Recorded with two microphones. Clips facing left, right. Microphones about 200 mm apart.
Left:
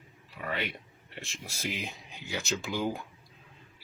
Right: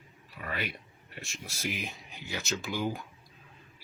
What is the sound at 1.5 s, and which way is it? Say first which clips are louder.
Speech: even; 15° left (ahead or behind).